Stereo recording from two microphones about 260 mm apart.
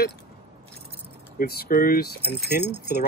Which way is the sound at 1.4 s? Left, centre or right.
Left.